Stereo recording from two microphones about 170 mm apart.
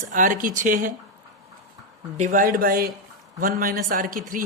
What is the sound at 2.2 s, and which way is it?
Speech, 50° right (ahead or behind).